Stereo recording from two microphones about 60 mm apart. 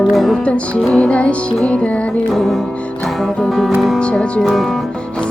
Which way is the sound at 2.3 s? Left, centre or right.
Centre.